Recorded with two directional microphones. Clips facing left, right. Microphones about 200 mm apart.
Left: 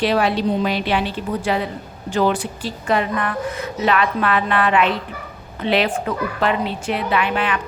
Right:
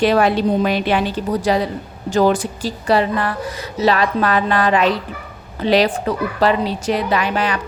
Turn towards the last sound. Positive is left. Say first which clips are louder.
# right 1 dB
turn(degrees=-40)  # may be behind; listen again after turning